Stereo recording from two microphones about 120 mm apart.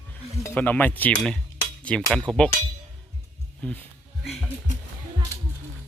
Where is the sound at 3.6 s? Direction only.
10° left (ahead or behind).